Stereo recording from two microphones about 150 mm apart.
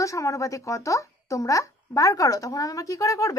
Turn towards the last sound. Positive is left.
turn(degrees=20)  # may be behind; listen again after turning